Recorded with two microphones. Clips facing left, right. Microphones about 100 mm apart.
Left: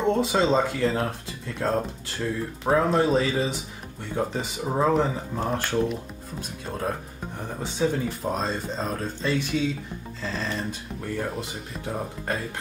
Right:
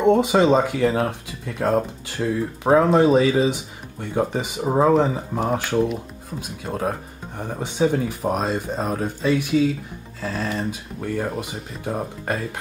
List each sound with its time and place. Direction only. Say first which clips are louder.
0.0 s speech: right 6 dB; 15° right (ahead or behind)